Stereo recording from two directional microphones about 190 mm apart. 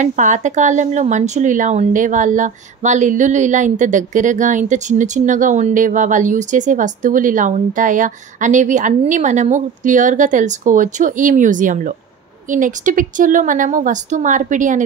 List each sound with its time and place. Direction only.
0.0 s speech: 40° right (ahead or behind)